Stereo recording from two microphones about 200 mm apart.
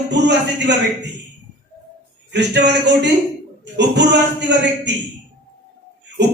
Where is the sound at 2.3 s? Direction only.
60° right (ahead or behind).